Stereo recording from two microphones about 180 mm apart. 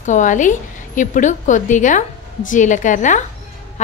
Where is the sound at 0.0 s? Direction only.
45° left (ahead or behind).